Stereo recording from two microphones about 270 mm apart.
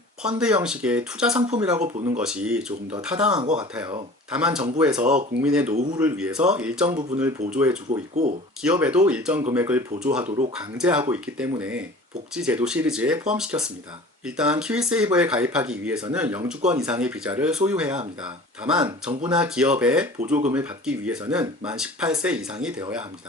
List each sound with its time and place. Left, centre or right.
0.2 s speech: centre
1.4 s speech: centre
2.2 s speech: centre
3.3 s speech: right
4.3 s speech: centre
10.2 s speech: right
10.5 s speech: centre